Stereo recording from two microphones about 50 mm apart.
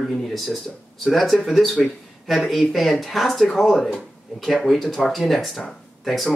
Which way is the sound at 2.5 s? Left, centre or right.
Centre.